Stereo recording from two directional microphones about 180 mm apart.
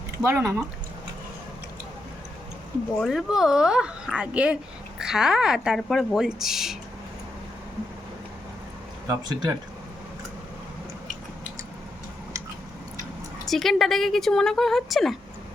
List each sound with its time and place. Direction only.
0.2 s speech: 15° right (ahead or behind)
3.0 s a woman's voice: centre (ahead or behind)
9.0 s speech: 20° right (ahead or behind)
13.5 s a woman's voice: centre (ahead or behind)